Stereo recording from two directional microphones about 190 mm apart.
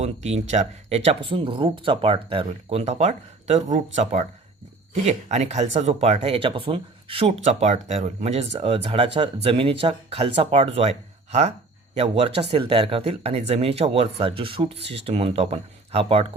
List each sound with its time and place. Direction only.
0.0 s speech: 35° right (ahead or behind)
14.8 s speech: 65° right (ahead or behind)
15.0 s speech: 30° right (ahead or behind)